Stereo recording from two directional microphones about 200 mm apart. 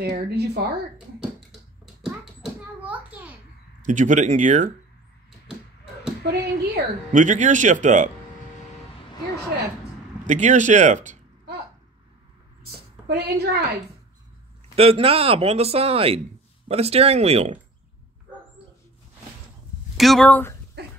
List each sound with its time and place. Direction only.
0.0 s speech: 55° right (ahead or behind)
2.0 s a sound: 5° right (ahead or behind)
3.8 s speech: 35° right (ahead or behind)
6.2 s speech: 55° right (ahead or behind)
7.1 s speech: 40° right (ahead or behind)
10.2 s speech: 35° right (ahead or behind)
13.1 s speech: 55° right (ahead or behind)
14.8 s speech: 30° right (ahead or behind)
20.0 s speech: centre (ahead or behind)